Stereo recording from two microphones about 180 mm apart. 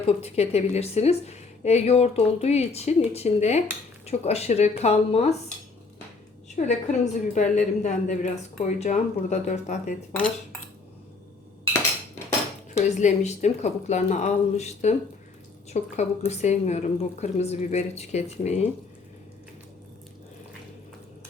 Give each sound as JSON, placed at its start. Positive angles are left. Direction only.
{"t": 0.0, "sound": "a woman's voice", "side_deg": 35}
{"t": 6.6, "sound": "a woman's voice", "side_deg": 40}
{"t": 13.0, "sound": "a woman's voice", "side_deg": 40}